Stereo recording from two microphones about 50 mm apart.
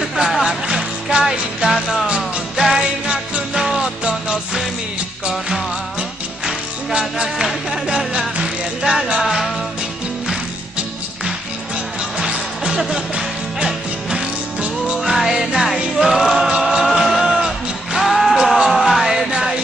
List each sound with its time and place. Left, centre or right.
0.2 s music: centre
2.0 s music: centre
6.4 s music: centre
12.2 s music: centre
15.0 s music: centre